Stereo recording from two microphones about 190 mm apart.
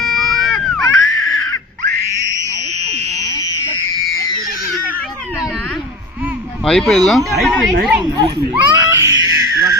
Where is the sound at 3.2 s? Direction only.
20° left (ahead or behind).